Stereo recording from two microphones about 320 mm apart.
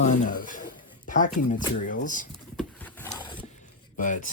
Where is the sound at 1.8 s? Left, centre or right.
Left.